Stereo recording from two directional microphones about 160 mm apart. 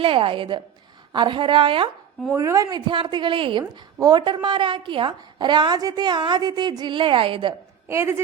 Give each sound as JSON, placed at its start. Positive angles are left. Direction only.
{"t": 0.0, "sound": "speech", "side_deg": -35}
{"t": 2.3, "sound": "a woman's voice", "side_deg": -20}
{"t": 7.9, "sound": "a woman's voice", "side_deg": -15}